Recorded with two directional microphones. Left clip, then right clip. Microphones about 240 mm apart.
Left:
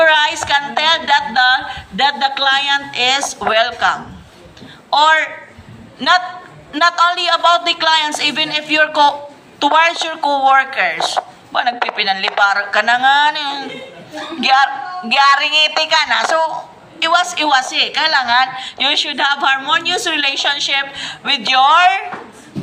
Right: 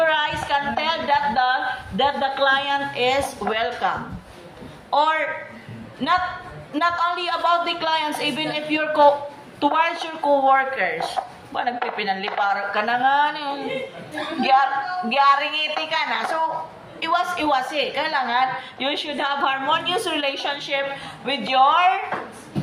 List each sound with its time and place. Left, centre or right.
0.0 s a sound: left
4.9 s a woman's voice: left
6.7 s a woman's voice: left